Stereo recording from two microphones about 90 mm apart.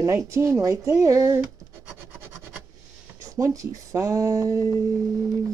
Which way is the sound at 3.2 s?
35° right (ahead or behind).